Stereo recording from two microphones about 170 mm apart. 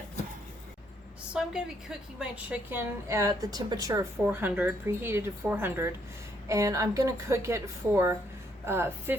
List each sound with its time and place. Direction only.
1.3 s a woman's voice: 5° right (ahead or behind)